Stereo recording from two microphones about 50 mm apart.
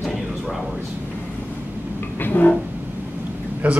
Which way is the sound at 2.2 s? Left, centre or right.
Left.